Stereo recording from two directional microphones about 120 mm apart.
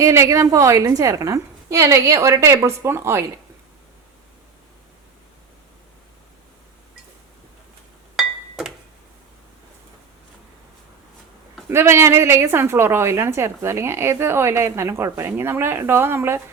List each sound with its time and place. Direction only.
0.0 s a woman's voice: 25° right (ahead or behind)
8.1 s glass: 5° right (ahead or behind)
11.7 s a woman's voice: 20° right (ahead or behind)